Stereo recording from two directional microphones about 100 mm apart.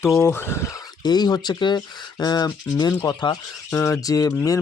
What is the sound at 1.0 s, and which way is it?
Speech, 45° left (ahead or behind).